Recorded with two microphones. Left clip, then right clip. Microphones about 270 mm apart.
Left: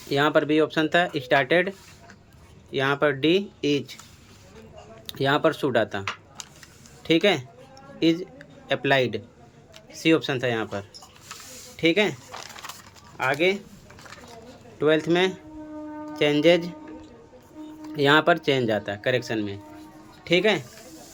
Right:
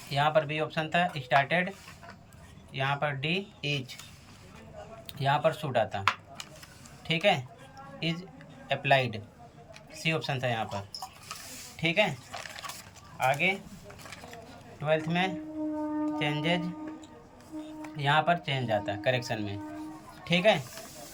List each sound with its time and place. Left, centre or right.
0.1 s speech: centre
2.7 s speech: centre
5.0 s speech: centre
7.0 s a sound: centre
9.9 s speech: centre
13.1 s speech: centre
14.8 s speech: centre
17.9 s speech: centre